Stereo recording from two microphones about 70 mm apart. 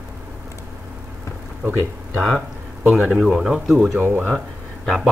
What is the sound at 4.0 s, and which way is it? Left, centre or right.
Speech, right.